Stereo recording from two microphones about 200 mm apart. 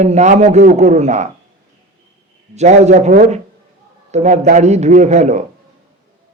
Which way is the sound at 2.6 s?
35° right (ahead or behind).